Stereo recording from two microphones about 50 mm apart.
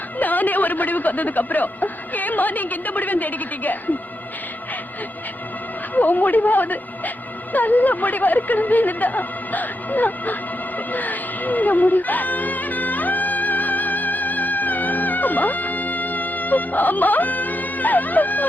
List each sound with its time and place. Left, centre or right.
0.2 s a man's voice: left
5.9 s a man's voice: left
10.8 s music: left